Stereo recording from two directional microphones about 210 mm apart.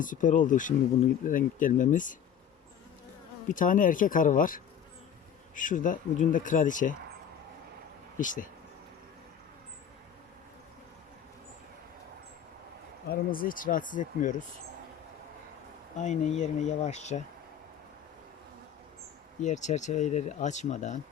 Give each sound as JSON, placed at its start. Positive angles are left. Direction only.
{"t": 0.0, "sound": "speech", "side_deg": 40}
{"t": 3.5, "sound": "speech", "side_deg": 40}
{"t": 8.2, "sound": "speech", "side_deg": 40}
{"t": 13.1, "sound": "speech", "side_deg": 45}
{"t": 16.0, "sound": "speech", "side_deg": 35}
{"t": 19.4, "sound": "speech", "side_deg": 35}